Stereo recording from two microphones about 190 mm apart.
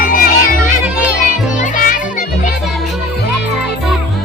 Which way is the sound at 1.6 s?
45° left (ahead or behind).